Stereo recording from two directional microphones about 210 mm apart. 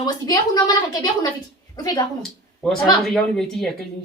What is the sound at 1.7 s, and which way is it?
Speech, 20° left (ahead or behind).